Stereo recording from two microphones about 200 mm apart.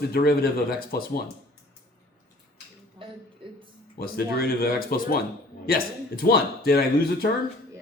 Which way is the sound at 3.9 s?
50° left (ahead or behind).